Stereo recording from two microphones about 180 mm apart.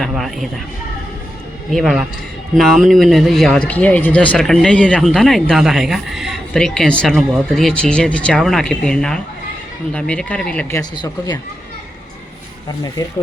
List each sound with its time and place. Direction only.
0.0 s speech: centre (ahead or behind)
1.7 s speech: centre (ahead or behind)
10.9 s speech: 25° left (ahead or behind)